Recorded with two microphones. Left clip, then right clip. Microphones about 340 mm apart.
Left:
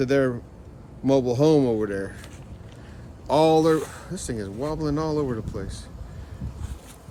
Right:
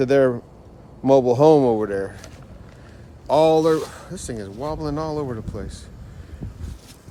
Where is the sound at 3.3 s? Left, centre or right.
Centre.